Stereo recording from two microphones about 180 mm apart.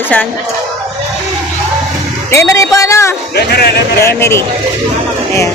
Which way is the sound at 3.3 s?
65° left (ahead or behind).